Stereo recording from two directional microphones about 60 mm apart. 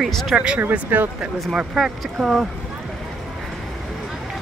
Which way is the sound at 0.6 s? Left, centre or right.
Right.